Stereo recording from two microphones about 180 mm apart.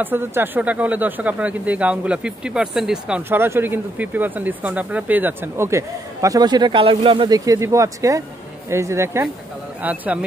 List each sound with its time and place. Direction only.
0.0 s speech: 10° right (ahead or behind)